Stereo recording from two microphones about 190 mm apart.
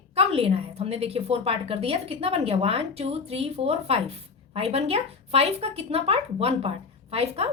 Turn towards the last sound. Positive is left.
turn(degrees=-30)  # may be behind; listen again after turning